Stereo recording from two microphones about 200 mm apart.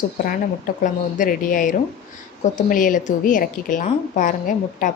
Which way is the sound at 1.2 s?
40° left (ahead or behind).